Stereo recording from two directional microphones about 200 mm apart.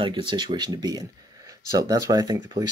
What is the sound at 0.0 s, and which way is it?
Speech, 25° right (ahead or behind).